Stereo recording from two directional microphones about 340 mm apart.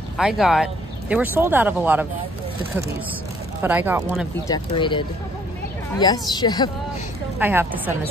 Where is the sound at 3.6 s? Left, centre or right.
Centre.